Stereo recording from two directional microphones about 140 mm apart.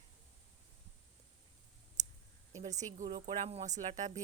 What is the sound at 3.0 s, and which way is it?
Speech, 40° right (ahead or behind).